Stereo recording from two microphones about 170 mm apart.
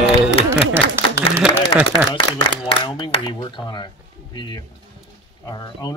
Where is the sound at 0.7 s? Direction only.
15° right (ahead or behind).